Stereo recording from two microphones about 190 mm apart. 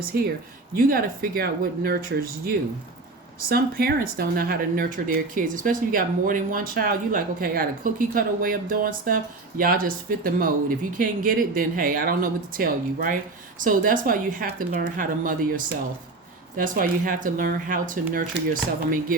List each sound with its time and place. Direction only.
0.1 s speech: 55° right (ahead or behind)